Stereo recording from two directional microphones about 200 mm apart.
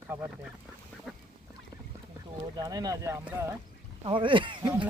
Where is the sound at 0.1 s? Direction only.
10° right (ahead or behind).